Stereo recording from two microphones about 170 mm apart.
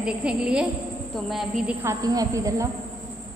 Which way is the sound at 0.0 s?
5° right (ahead or behind).